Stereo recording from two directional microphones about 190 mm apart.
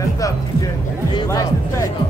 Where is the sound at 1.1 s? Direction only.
20° left (ahead or behind).